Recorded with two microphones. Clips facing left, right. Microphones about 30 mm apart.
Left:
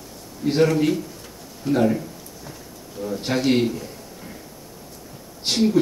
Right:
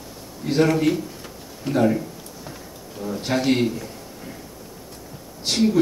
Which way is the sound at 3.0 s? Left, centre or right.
Centre.